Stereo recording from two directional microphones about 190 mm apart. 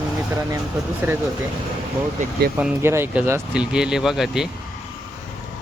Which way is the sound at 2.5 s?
10° right (ahead or behind).